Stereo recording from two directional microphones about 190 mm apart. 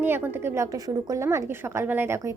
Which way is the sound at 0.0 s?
10° right (ahead or behind).